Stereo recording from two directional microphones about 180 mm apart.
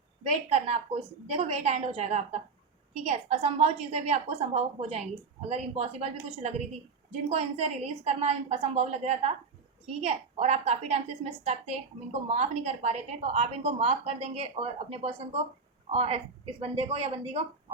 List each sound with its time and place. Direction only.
0.3 s a woman's voice: 35° right (ahead or behind)